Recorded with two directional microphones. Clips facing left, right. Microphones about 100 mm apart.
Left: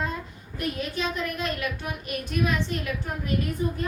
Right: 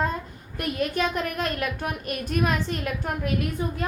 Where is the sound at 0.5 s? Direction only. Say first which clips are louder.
Right 3 dB; 55° right (ahead or behind).